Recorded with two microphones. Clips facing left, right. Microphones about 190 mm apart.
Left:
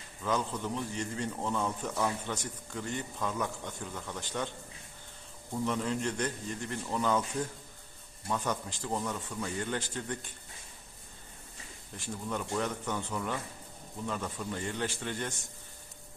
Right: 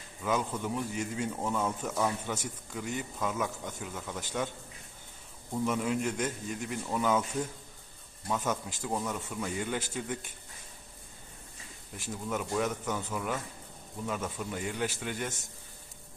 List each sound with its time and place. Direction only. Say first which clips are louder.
0.2 s a man's voice: right 1 dB; 10° right (ahead or behind)
5.6 s a man's voice: right 2 dB; 10° right (ahead or behind)
8.3 s a man's voice: right 1 dB; 5° right (ahead or behind)
12.3 s a man's voice: right 2 dB; 5° right (ahead or behind)